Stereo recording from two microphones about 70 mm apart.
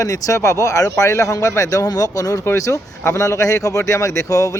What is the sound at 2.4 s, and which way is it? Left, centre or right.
Speech, left.